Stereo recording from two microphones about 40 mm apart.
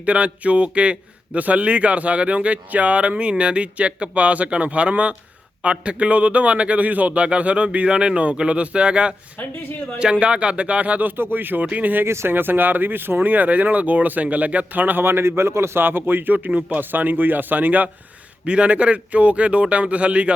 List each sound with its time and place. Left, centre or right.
0.0 s a man's voice: right
11.2 s speech: right
12.0 s speech: right
15.0 s a man's voice: right
16.5 s a man's voice: right
16.9 s speech: right
18.4 s a man's voice: right